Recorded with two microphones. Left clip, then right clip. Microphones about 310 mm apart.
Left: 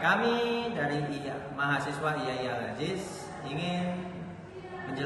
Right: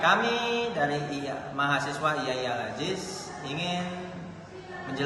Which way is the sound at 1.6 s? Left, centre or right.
Centre.